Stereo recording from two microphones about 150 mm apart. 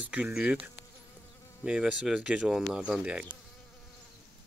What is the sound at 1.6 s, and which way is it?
Speech, 5° right (ahead or behind).